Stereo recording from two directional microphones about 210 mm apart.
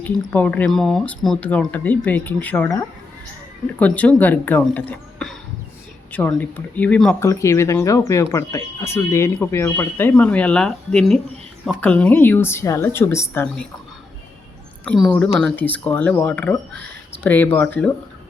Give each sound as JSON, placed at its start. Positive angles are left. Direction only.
{"t": 0.0, "sound": "speech", "side_deg": 10}
{"t": 14.8, "sound": "a woman's voice", "side_deg": 0}